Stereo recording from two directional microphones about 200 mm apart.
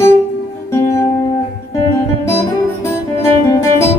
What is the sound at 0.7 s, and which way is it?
Music, 15° left (ahead or behind).